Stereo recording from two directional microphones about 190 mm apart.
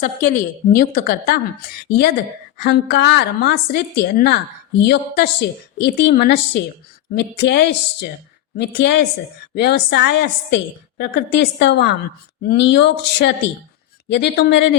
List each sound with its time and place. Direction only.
0.0 s a woman's voice: 40° left (ahead or behind); by 14.8 s 65° left (ahead or behind)